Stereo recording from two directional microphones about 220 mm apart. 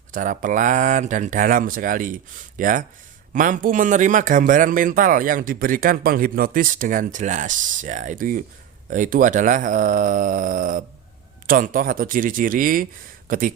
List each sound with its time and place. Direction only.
0.1 s speech: 35° right (ahead or behind)